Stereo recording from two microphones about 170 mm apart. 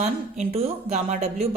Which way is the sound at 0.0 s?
40° right (ahead or behind).